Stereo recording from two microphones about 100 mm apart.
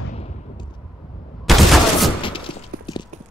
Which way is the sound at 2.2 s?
60° left (ahead or behind).